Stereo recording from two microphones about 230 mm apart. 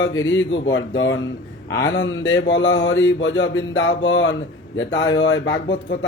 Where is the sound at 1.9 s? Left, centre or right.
Left.